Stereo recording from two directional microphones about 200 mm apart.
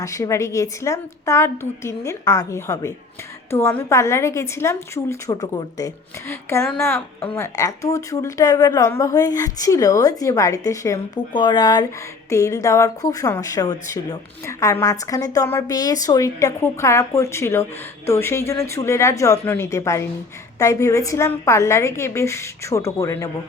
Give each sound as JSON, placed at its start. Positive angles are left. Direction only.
{"t": 0.0, "sound": "a woman's voice", "side_deg": 15}